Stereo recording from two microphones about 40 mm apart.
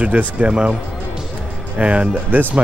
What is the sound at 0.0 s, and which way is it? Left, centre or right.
Speech, right.